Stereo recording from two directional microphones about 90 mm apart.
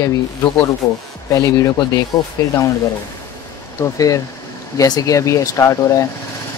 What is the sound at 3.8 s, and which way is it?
Speech, 40° left (ahead or behind).